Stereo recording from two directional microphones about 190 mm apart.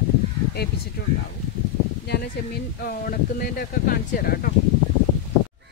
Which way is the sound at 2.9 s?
50° left (ahead or behind).